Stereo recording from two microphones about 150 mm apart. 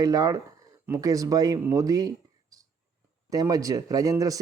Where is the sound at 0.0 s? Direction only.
25° right (ahead or behind).